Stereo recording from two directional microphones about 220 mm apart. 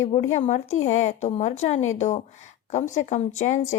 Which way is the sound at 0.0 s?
30° left (ahead or behind).